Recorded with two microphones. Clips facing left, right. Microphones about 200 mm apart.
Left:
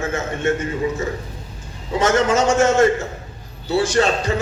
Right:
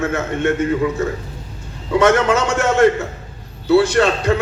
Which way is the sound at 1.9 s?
60° right (ahead or behind).